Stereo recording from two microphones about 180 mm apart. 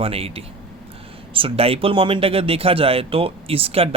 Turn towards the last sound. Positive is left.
turn(degrees=-35)  # may be behind; listen again after turning